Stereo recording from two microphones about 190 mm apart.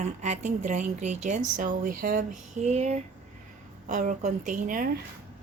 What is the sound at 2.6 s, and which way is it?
A woman's voice, 35° right (ahead or behind).